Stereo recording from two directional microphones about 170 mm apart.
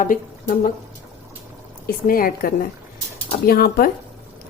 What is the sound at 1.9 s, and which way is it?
Speech, 55° left (ahead or behind).